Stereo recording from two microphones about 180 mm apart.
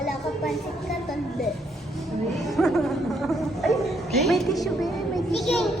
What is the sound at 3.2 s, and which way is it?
Gargling, centre (ahead or behind).